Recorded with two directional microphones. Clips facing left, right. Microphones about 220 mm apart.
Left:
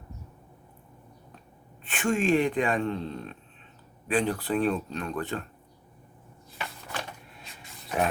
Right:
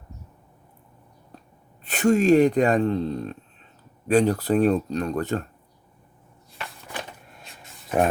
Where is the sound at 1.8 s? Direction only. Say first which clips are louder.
Right 7 dB; 40° right (ahead or behind).